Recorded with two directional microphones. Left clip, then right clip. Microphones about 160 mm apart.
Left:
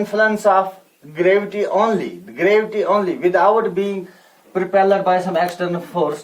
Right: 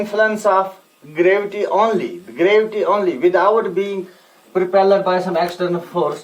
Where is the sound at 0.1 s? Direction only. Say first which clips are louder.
Left 1 dB; 30° right (ahead or behind).